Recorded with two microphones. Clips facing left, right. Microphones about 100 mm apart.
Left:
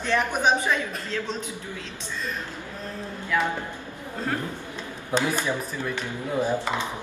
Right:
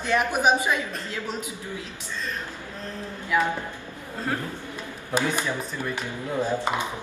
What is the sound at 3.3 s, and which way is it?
Speech, 10° right (ahead or behind).